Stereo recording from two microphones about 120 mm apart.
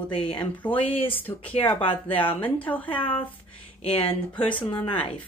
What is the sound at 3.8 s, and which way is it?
Speech, 50° left (ahead or behind).